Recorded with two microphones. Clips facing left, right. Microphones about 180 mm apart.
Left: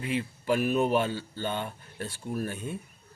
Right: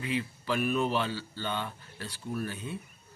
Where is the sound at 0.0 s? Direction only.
45° left (ahead or behind).